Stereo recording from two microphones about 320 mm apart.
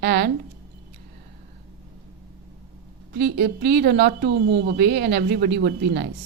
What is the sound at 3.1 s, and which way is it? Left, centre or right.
A woman's voice, right.